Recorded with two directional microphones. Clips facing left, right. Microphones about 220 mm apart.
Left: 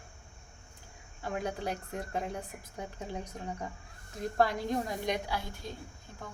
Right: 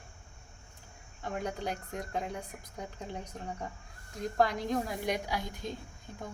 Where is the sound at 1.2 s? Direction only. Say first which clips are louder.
Left 1 dB; 5° left (ahead or behind).